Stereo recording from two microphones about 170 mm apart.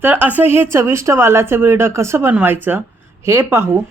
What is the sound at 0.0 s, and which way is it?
Speech, 10° right (ahead or behind).